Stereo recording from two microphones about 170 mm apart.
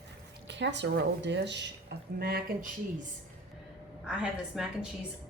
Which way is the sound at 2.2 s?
65° right (ahead or behind).